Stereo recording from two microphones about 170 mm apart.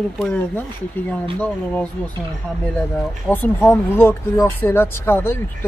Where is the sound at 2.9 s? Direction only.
10° left (ahead or behind).